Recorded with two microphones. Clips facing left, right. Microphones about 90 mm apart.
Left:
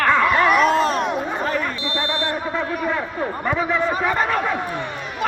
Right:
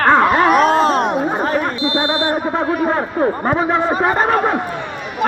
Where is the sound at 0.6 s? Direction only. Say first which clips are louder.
Right 4 dB; 60° right (ahead or behind).